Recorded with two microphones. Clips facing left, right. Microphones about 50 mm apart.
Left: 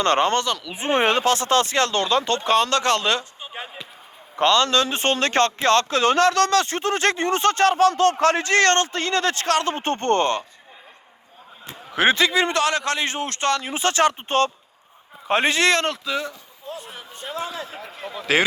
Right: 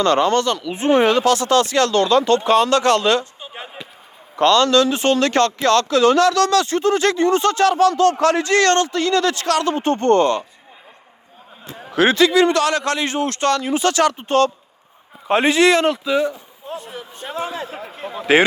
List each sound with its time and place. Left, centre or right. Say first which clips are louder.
0.0 s speech: right 3 dB; left
2.4 s speech: right 4 dB; centre
2.8 s speech: right 5 dB; centre
4.4 s speech: right 4 dB; left
11.9 s a man's voice: right 4 dB; left
15.3 s speech: right 4 dB; centre
16.7 s speech: right 8 dB; centre
17.3 s a man's voice: right 4 dB; right